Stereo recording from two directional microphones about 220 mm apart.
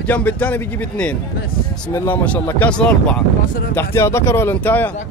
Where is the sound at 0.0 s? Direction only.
10° left (ahead or behind).